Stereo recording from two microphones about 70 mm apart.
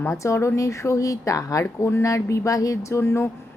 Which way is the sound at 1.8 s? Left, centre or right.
Left.